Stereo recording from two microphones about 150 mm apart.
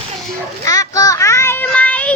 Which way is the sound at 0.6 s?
25° left (ahead or behind).